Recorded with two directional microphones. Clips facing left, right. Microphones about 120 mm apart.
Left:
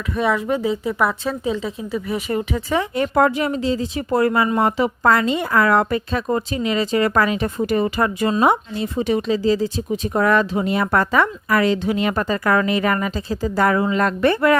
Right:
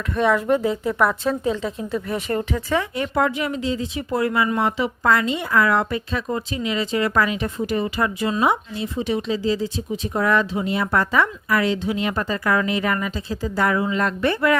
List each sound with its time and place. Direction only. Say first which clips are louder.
0.1 s a woman's voice: right 1 dB; 5° left (ahead or behind)
2.9 s speech: left 4 dB; 40° left (ahead or behind)